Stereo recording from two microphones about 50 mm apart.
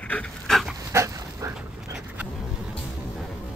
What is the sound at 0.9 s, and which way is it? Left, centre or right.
Dog, right.